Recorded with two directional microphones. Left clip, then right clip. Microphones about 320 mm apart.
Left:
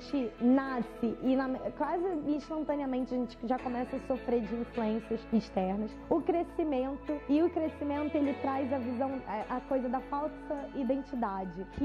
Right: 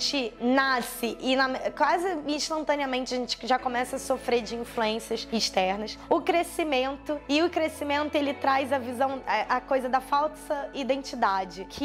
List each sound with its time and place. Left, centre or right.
0.1 s a woman's voice: centre